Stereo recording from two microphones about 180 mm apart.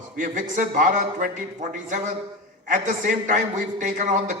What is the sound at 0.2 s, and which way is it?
A man's voice, 45° right (ahead or behind).